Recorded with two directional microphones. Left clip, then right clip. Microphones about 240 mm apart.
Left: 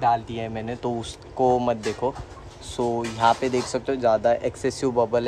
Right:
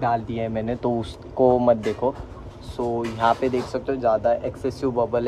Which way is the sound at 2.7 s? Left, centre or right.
Left.